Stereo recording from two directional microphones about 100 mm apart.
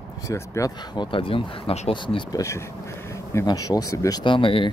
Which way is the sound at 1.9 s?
55° left (ahead or behind).